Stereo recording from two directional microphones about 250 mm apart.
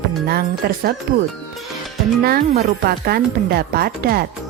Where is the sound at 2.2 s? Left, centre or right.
Right.